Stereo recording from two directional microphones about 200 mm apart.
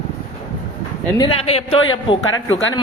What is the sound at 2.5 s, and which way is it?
Speech, 70° left (ahead or behind).